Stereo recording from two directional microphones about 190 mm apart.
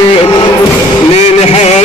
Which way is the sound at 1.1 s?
35° left (ahead or behind).